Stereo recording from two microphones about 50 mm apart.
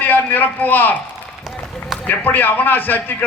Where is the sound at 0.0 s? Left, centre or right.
Left.